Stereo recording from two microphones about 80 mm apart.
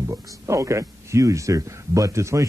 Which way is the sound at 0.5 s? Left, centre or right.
Right.